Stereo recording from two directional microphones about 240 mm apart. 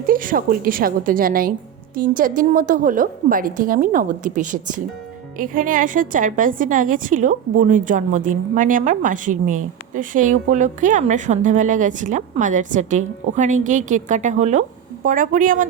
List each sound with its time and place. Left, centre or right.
0.1 s a woman's voice: right